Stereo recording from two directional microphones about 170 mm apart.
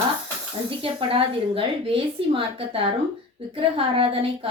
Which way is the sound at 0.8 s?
30° right (ahead or behind).